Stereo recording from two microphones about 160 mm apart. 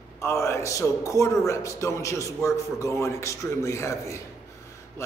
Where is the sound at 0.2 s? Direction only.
15° left (ahead or behind).